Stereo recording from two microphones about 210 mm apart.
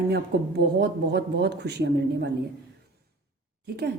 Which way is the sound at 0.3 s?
50° right (ahead or behind).